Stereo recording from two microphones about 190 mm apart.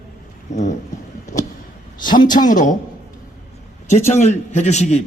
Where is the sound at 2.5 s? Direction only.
45° left (ahead or behind).